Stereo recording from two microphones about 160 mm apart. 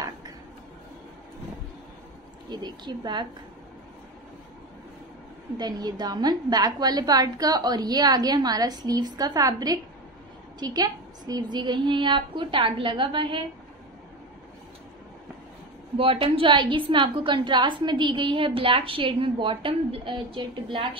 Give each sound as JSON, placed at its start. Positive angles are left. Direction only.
{"t": 2.5, "sound": "a woman's voice", "side_deg": -25}
{"t": 5.6, "sound": "a woman's voice", "side_deg": -25}
{"t": 16.0, "sound": "a woman's voice", "side_deg": -35}